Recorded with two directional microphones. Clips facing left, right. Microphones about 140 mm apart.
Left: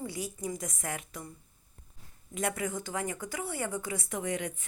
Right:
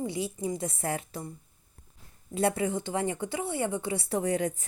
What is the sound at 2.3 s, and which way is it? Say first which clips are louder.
Speech: right 6 dB; 30° right (ahead or behind).